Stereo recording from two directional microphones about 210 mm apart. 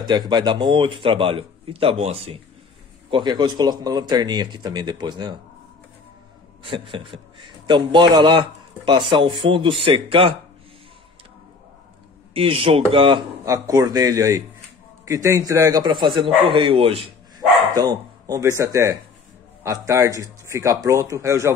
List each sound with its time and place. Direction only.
0.0 s a man's voice: 20° right (ahead or behind)
6.6 s a man's voice: 25° right (ahead or behind)
12.4 s a man's voice: 25° right (ahead or behind)